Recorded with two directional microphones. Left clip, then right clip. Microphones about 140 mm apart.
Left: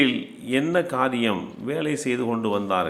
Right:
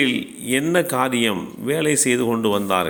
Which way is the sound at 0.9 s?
30° right (ahead or behind).